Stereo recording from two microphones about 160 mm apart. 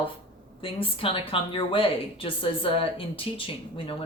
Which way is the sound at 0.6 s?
35° left (ahead or behind).